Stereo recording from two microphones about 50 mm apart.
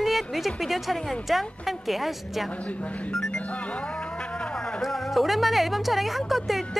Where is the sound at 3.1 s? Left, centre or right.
Centre.